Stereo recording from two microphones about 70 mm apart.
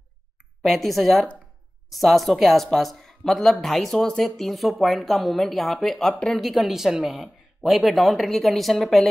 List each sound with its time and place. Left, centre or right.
0.6 s speech: centre